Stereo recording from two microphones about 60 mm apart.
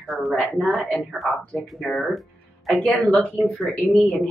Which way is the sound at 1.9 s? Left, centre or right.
Centre.